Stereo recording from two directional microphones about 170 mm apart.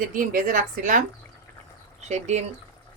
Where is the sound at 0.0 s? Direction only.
55° right (ahead or behind).